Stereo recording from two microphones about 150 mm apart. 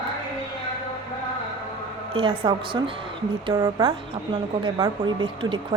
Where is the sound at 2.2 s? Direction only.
35° right (ahead or behind).